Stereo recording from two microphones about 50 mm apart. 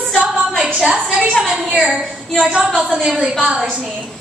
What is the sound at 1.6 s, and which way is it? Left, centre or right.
A woman's voice, right.